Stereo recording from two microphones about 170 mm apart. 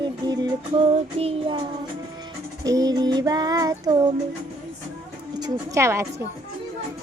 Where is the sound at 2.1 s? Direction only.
25° right (ahead or behind).